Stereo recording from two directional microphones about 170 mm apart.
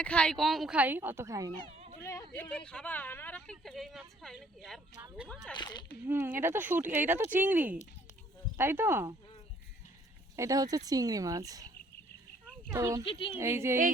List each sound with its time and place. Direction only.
0.0 s speech: 5° left (ahead or behind); by 1.5 s 20° right (ahead or behind)
2.0 s speech: 15° left (ahead or behind)
5.5 s speech: 25° left (ahead or behind)
6.1 s speech: 10° right (ahead or behind)
10.3 s speech: 20° right (ahead or behind)
13.1 s a woman's voice: 30° left (ahead or behind)
13.3 s speech: 15° right (ahead or behind)